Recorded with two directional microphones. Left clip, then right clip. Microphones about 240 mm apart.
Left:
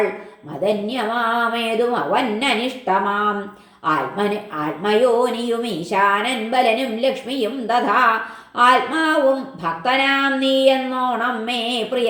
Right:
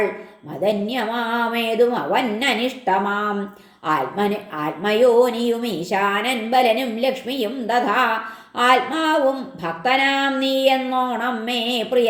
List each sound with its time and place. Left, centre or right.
0.6 s speech: right